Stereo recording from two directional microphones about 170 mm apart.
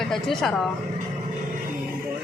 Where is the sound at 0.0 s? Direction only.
Centre (ahead or behind).